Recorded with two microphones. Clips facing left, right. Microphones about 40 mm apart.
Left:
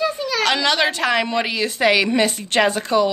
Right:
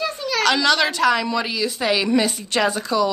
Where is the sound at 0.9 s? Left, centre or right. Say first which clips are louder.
Right 1 dB; left.